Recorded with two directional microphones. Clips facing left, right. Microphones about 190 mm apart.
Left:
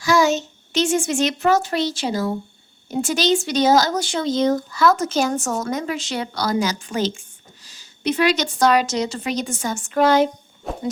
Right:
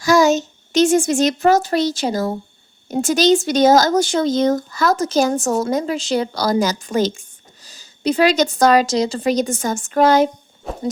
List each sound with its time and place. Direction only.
0.0 s a child's voice: 40° right (ahead or behind)
10.6 s owl: centre (ahead or behind)